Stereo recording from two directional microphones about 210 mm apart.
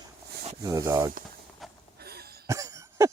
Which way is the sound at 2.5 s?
15° right (ahead or behind).